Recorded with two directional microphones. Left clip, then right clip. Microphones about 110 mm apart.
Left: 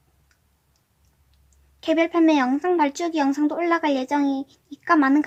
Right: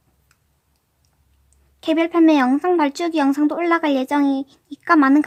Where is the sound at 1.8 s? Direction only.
30° right (ahead or behind).